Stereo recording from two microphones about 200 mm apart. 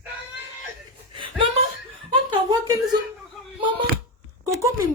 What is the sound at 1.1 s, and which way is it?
Chuckle, 25° right (ahead or behind).